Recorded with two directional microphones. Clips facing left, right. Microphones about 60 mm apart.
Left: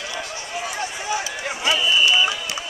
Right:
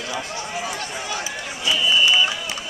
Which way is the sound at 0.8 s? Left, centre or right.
Centre.